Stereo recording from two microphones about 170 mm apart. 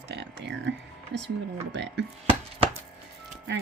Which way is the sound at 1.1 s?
90° right.